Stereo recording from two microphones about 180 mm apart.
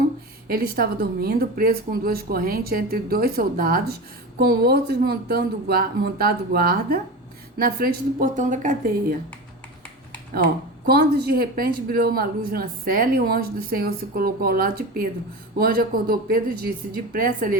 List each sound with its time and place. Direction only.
0.4 s a woman's voice: 55° right (ahead or behind)
10.8 s a woman's voice: 60° right (ahead or behind)